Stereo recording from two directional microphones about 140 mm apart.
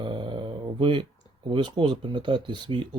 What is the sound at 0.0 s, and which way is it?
Dog, 35° right (ahead or behind).